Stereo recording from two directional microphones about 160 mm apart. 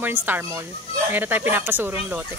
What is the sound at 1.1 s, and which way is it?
A woman's voice, 10° right (ahead or behind).